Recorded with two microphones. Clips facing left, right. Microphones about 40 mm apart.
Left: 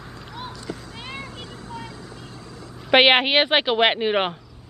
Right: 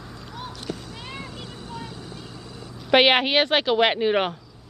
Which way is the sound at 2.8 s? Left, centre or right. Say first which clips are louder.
Left 2 dB; centre.